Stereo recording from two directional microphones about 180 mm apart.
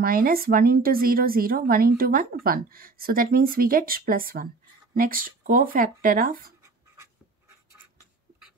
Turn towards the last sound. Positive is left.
turn(degrees=-15)  # may be behind; listen again after turning